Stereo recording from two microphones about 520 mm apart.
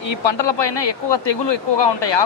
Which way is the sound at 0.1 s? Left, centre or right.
Left.